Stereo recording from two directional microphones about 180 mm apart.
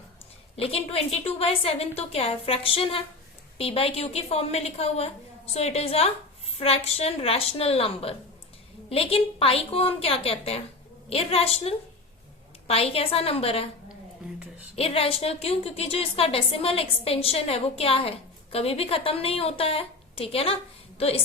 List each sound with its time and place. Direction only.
0.5 s a woman's voice: 30° left (ahead or behind)
14.8 s a woman's voice: 35° left (ahead or behind)